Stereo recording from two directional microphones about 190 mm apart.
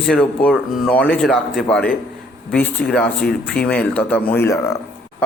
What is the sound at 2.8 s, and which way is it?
Speech, 55° left (ahead or behind).